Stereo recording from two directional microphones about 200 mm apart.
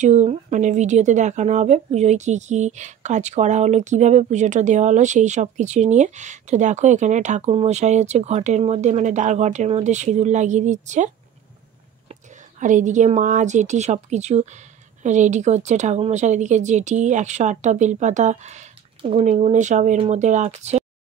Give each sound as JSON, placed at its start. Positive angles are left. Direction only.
{"t": 0.0, "sound": "speech", "side_deg": -35}
{"t": 12.1, "sound": "a woman's voice", "side_deg": -40}